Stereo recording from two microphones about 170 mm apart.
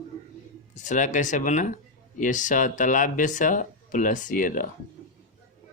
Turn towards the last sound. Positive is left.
turn(degrees=50)  # may be behind; listen again after turning